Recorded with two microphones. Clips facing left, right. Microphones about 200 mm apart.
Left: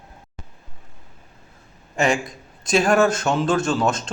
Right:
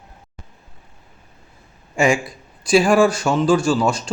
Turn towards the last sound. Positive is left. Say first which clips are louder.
# right 3 dB
turn(degrees=-5)  # may be behind; listen again after turning